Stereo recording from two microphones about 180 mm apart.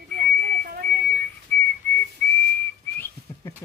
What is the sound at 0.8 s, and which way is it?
Whistling, 10° left (ahead or behind).